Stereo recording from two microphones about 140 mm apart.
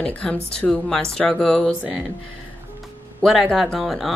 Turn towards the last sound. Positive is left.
turn(degrees=0)  # may be behind; listen again after turning